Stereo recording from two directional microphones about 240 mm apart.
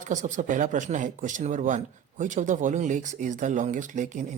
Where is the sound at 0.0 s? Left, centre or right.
Right.